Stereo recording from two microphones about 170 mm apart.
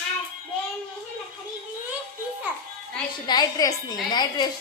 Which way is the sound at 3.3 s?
25° left (ahead or behind).